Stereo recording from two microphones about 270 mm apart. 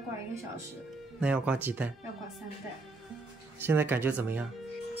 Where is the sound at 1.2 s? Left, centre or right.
Centre.